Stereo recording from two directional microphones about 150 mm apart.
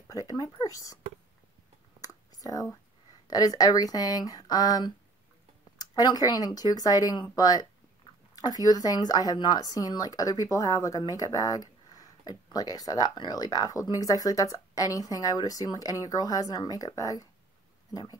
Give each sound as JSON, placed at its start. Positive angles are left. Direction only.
{"t": 0.1, "sound": "speech", "side_deg": 25}
{"t": 2.3, "sound": "speech", "side_deg": 25}